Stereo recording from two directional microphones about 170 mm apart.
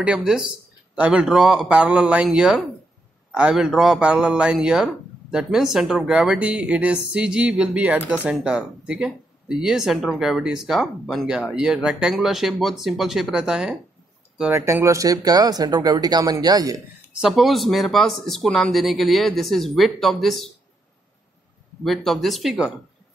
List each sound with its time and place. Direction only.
0.0 s a man's voice: 5° right (ahead or behind); by 16.7 s 20° right (ahead or behind)
17.1 s a man's voice: centre (ahead or behind)
21.8 s a man's voice: centre (ahead or behind)